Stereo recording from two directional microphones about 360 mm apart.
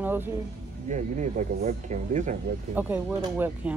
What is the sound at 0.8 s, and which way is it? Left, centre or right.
Speech, centre.